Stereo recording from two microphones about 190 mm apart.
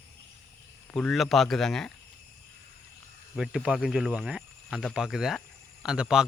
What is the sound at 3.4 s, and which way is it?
Speech, 5° right (ahead or behind).